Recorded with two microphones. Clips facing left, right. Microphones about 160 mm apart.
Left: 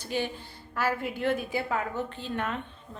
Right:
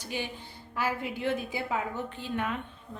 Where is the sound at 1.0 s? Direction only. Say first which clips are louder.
Left 2 dB; 55° left (ahead or behind).